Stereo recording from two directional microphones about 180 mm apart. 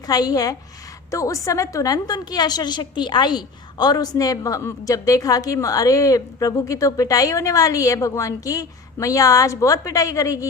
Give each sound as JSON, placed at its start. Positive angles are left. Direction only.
{"t": 0.1, "sound": "a woman's voice", "side_deg": 20}